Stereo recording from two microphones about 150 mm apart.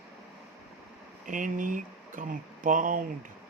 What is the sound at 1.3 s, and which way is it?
Speech, 60° right (ahead or behind).